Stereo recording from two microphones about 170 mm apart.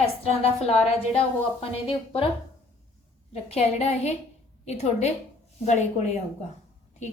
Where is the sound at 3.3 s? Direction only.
35° left (ahead or behind).